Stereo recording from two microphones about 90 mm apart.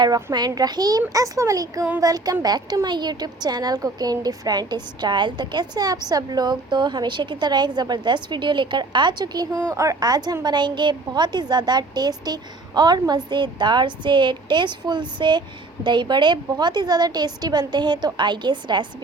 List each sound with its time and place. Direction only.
0.3 s a woman's voice: 45° right (ahead or behind)